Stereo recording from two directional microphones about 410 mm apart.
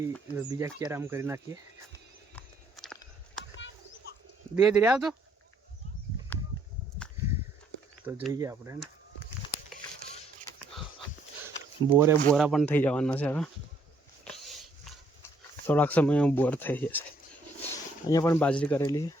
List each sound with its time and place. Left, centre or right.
0.1 s speech: centre
2.3 s a sound: centre
4.1 s bird: left
4.5 s speech: centre
8.0 s speech: centre
11.4 s a sound: centre
12.3 s speech: centre
14.3 s dog: centre
15.6 s speech: centre
18.1 s speech: centre